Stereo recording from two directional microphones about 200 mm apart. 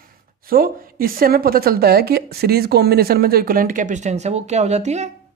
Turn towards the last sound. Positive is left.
turn(degrees=-35)  # may be behind; listen again after turning